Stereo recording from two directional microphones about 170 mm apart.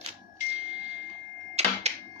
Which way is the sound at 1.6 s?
40° right (ahead or behind).